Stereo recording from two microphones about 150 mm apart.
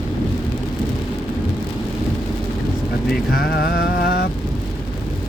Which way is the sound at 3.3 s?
90° left.